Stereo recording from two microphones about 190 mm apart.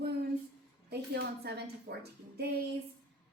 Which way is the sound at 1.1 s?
60° right (ahead or behind).